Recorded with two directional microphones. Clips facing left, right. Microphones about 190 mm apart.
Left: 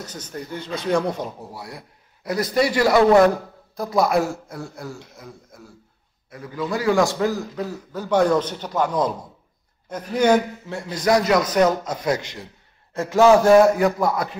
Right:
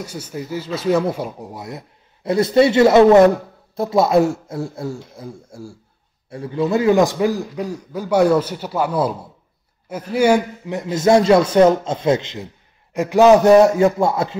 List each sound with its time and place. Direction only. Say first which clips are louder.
0.0 s a man's voice: right 4 dB; 10° right (ahead or behind); by 14.3 s 25° right (ahead or behind)